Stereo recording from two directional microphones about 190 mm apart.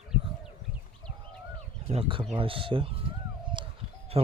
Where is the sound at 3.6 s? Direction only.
25° right (ahead or behind).